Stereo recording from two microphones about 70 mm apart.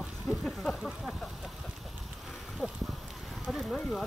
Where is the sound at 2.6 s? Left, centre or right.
Centre.